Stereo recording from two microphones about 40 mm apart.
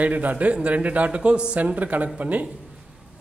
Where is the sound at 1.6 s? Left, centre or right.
Right.